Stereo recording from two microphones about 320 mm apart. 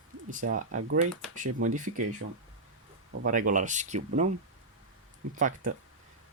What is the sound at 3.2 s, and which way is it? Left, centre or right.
Speech, right.